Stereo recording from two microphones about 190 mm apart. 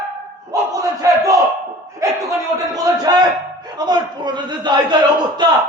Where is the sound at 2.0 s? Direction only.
15° right (ahead or behind).